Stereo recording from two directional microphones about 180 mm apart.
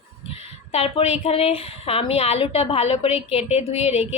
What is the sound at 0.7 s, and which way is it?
A woman's voice, 35° left (ahead or behind).